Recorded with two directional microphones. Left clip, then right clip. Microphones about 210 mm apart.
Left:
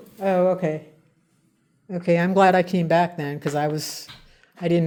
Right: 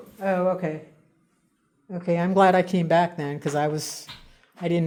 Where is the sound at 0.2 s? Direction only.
25° left (ahead or behind).